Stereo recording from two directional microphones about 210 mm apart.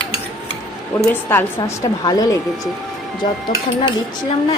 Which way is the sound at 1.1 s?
10° left (ahead or behind).